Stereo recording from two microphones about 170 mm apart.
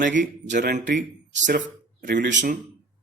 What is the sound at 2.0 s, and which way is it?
Speech, 55° right (ahead or behind).